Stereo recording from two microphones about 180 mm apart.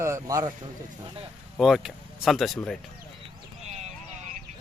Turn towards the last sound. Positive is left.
turn(degrees=-40)  # may be behind; listen again after turning